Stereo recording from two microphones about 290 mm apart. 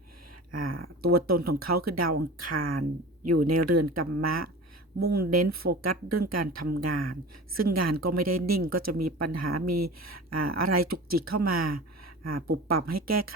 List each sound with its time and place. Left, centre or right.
0.5 s speech: right
4.9 s speech: right
5.3 s speech: right
12.9 s speech: right